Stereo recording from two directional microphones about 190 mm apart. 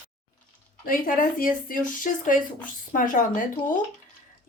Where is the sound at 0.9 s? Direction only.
45° left (ahead or behind).